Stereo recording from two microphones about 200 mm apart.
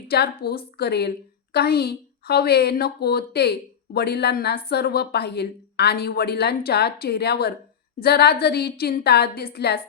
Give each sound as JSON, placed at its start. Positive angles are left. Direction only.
{"t": 0.1, "sound": "a woman's voice", "side_deg": 50}